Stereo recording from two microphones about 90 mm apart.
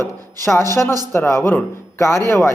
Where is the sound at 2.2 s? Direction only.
40° right (ahead or behind).